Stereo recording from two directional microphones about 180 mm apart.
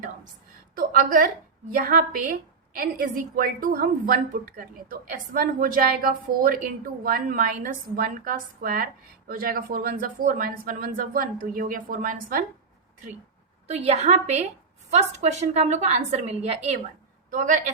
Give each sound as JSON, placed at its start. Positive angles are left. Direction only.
{"t": 0.8, "sound": "a woman's voice", "side_deg": -50}
{"t": 13.7, "sound": "a woman's voice", "side_deg": -35}